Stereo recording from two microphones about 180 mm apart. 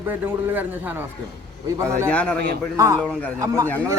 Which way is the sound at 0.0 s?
10° right (ahead or behind).